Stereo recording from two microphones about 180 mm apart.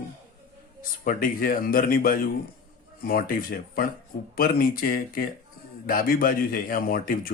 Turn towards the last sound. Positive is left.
turn(degrees=50)  # may be behind; listen again after turning